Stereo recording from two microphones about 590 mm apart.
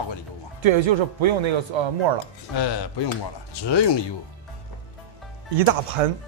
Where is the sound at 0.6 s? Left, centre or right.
Right.